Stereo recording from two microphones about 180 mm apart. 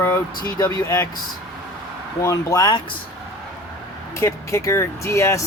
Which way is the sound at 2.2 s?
20° left (ahead or behind).